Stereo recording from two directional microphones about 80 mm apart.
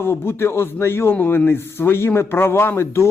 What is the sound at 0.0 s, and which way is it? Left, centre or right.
Speech, left.